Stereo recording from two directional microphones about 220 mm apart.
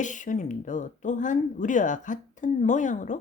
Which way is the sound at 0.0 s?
35° left (ahead or behind).